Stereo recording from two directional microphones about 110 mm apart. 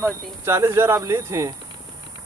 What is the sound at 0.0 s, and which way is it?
Speech, 25° right (ahead or behind).